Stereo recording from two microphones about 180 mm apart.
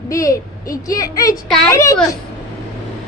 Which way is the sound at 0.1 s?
20° left (ahead or behind).